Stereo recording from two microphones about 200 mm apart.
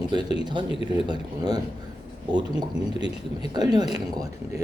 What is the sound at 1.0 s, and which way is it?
Speech, 20° right (ahead or behind).